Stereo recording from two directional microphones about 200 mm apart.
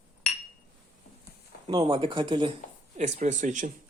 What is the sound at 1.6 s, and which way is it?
Speech, 25° right (ahead or behind).